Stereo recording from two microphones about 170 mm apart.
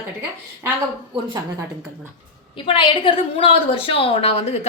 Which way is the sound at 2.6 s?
30° left (ahead or behind).